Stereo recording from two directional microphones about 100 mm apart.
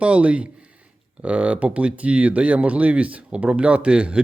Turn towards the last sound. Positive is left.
turn(degrees=-10)  # may be behind; listen again after turning